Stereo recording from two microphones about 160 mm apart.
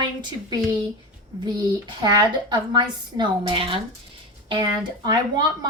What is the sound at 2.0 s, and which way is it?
A woman's voice, 30° right (ahead or behind).